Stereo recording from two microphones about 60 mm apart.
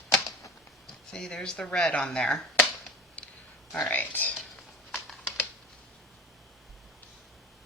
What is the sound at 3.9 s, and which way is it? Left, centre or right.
Speech, left.